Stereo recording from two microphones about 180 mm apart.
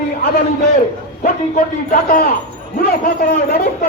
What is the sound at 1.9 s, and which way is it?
A man's voice, 55° left (ahead or behind).